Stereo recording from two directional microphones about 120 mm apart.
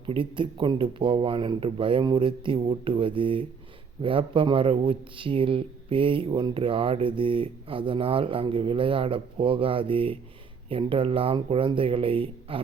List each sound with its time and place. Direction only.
0.0 s speech: 45° right (ahead or behind)